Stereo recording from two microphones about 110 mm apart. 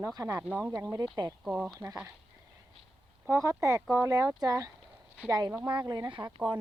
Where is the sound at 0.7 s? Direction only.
30° right (ahead or behind).